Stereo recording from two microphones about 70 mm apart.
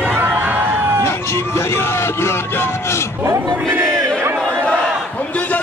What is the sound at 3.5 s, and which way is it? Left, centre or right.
Battle cry, right.